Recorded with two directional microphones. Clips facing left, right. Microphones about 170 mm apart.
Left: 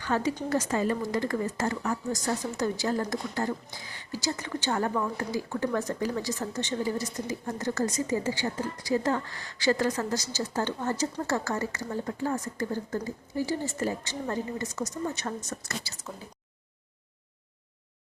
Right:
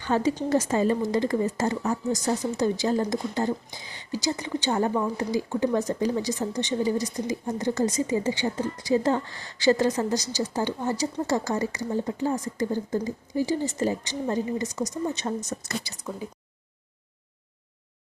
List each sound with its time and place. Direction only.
0.0 s speech: 25° right (ahead or behind)